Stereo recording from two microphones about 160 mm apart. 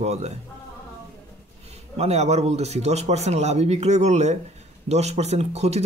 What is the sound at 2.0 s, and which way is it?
Speech, 40° right (ahead or behind).